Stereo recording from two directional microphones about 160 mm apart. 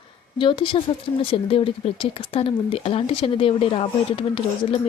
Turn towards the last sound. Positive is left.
turn(degrees=30)  # may be behind; listen again after turning